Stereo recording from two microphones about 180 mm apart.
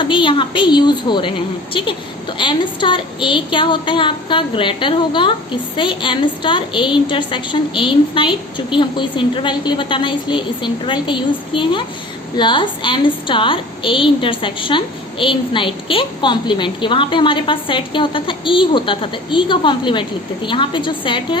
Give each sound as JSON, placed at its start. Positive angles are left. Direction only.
{"t": 0.0, "sound": "a woman's voice", "side_deg": 25}